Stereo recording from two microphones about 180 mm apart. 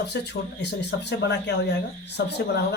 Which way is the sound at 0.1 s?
70° left (ahead or behind).